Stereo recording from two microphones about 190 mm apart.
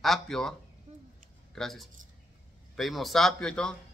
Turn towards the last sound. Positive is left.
turn(degrees=5)  # may be behind; listen again after turning